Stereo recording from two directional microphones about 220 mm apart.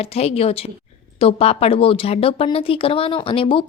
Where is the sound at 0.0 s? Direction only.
25° left (ahead or behind).